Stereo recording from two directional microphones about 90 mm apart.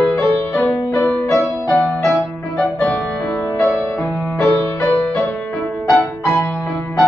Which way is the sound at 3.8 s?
Centre (ahead or behind).